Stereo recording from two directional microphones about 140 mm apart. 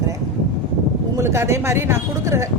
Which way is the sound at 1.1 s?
20° right (ahead or behind).